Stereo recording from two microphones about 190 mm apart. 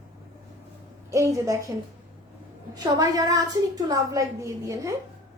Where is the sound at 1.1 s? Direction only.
15° right (ahead or behind).